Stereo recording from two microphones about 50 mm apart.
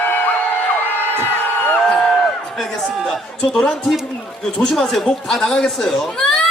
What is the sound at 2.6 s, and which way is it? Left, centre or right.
Speech, centre.